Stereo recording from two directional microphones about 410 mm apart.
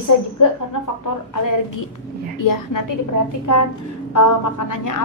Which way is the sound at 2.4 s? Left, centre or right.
Left.